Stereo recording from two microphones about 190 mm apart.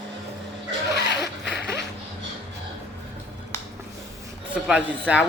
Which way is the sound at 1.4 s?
60° left (ahead or behind).